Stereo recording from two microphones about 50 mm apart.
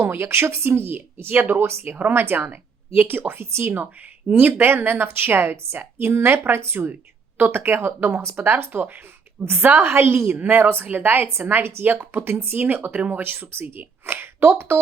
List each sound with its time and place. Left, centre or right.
0.0 s a woman's voice: right
4.3 s a woman's voice: right
8.2 s a woman's voice: right